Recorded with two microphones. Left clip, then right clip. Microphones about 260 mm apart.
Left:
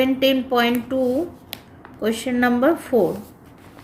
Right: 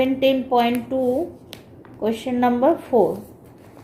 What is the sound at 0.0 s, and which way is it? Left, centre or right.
Speech, left.